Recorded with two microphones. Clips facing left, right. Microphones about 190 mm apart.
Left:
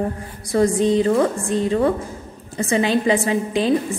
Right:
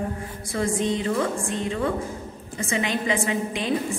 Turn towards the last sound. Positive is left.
turn(degrees=35)  # may be behind; listen again after turning